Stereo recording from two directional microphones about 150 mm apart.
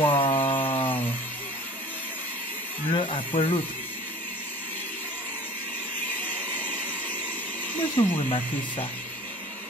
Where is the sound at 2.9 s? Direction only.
35° left (ahead or behind).